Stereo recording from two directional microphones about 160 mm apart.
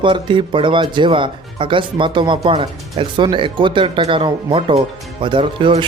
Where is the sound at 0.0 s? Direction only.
30° right (ahead or behind).